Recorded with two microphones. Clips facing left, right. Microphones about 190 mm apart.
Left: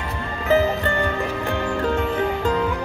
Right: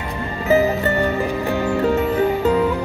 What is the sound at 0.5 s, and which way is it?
Music, 5° right (ahead or behind).